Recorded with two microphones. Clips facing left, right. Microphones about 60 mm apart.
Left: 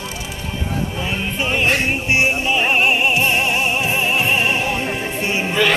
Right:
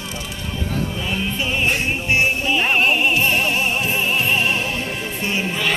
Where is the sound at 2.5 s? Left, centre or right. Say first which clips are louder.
Even; centre.